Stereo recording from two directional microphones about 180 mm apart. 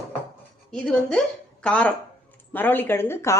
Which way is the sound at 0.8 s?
5° left (ahead or behind).